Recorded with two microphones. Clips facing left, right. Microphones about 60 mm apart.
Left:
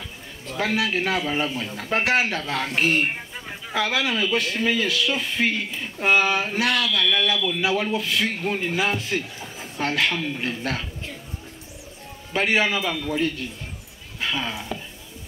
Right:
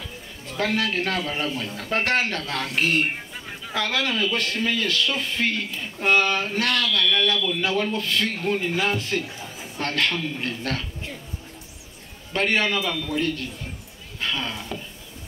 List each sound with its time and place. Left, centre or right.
0.5 s a man's voice: centre
12.3 s a man's voice: centre